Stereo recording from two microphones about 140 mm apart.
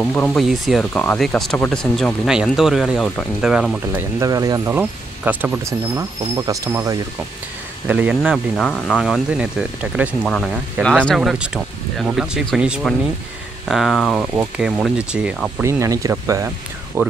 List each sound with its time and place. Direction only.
0.0 s speech: 10° left (ahead or behind)
0.4 s speech: centre (ahead or behind)
4.2 s speech: 25° right (ahead or behind)
4.7 s speech: 10° right (ahead or behind)
7.8 s speech: 10° right (ahead or behind)
10.2 s speech: 5° left (ahead or behind)
14.3 s speech: 10° right (ahead or behind)
15.6 s speech: 25° right (ahead or behind)